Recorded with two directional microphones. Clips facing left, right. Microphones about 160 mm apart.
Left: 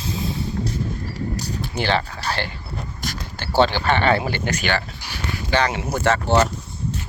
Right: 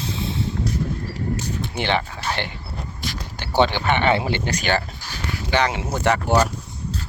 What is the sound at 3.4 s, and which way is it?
Speech, 15° right (ahead or behind).